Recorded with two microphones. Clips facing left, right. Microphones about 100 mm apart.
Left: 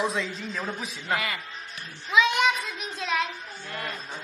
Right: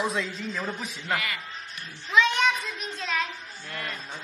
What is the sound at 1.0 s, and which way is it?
Speech, 25° left (ahead or behind).